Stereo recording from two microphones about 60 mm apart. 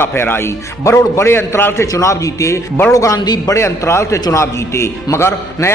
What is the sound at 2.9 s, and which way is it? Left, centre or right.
Speech, left.